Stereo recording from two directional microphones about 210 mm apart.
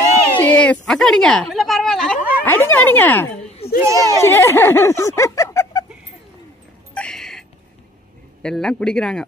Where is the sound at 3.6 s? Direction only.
50° left (ahead or behind).